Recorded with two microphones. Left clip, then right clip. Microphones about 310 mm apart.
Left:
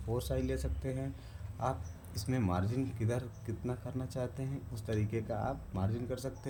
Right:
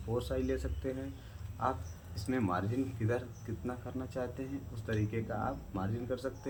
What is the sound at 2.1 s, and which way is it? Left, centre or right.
Speech, left.